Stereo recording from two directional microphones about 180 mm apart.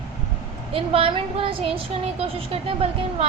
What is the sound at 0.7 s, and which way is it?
A woman's voice, 30° right (ahead or behind).